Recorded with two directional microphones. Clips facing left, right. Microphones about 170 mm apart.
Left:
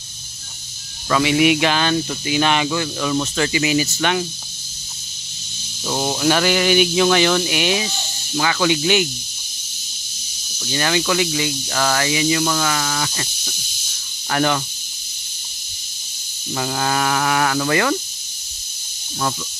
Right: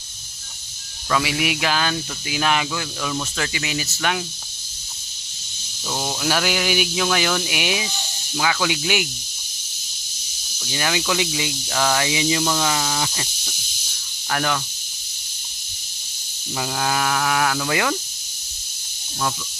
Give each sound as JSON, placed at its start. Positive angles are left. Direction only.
{"t": 1.0, "sound": "speech", "side_deg": 0}
{"t": 5.9, "sound": "snake", "side_deg": 15}
{"t": 6.1, "sound": "speech", "side_deg": -5}
{"t": 10.6, "sound": "speech", "side_deg": -5}
{"t": 14.3, "sound": "speech", "side_deg": 5}
{"t": 16.5, "sound": "speech", "side_deg": 0}